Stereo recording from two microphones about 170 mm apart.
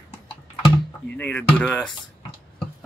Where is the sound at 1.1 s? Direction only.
10° left (ahead or behind).